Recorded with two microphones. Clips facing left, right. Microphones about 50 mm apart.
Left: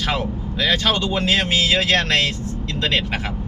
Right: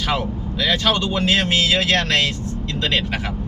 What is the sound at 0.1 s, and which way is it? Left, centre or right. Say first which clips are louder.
Speech: right 1 dB; centre.